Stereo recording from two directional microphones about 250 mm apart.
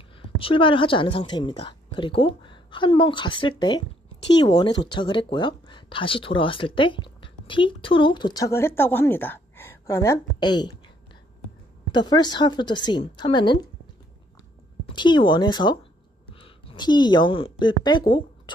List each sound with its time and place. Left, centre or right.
0.4 s a woman's voice: left
11.9 s speech: centre
15.0 s a woman's voice: centre